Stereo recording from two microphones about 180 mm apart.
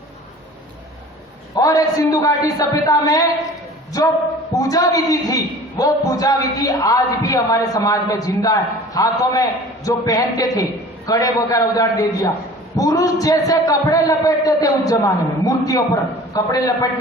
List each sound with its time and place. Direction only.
1.5 s a man's voice: 20° left (ahead or behind)